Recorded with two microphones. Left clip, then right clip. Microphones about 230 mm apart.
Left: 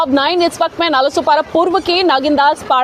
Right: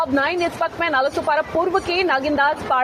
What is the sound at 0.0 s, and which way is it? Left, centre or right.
A woman's voice, left.